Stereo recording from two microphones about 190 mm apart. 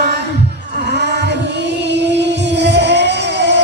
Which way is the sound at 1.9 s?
65° right (ahead or behind).